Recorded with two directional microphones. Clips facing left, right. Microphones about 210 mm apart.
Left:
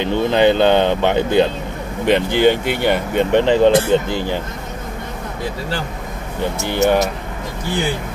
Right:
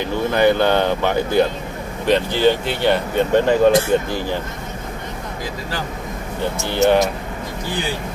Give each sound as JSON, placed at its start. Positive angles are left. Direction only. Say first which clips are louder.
{"t": 0.0, "sound": "speech", "louder": "left 2 dB", "side_deg": 20}
{"t": 6.7, "sound": "speech", "louder": "right 1 dB", "side_deg": 10}